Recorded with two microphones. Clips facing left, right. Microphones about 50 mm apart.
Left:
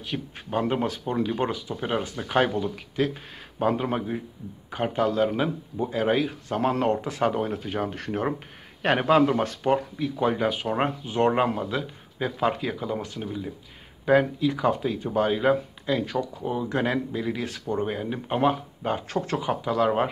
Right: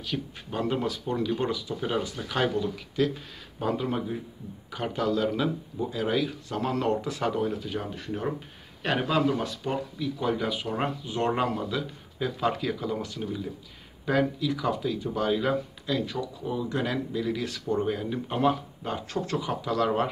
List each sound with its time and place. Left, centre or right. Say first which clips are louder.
0.0 s speech: even; left
14.0 s speech: left 5 dB; left